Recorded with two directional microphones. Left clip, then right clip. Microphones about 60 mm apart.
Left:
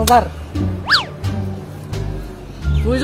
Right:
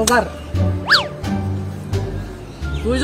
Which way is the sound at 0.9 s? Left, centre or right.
Centre.